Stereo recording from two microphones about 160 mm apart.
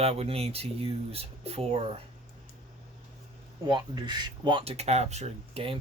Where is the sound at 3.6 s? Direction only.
25° right (ahead or behind).